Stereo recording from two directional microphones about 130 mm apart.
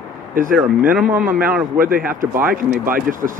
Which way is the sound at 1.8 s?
90° right.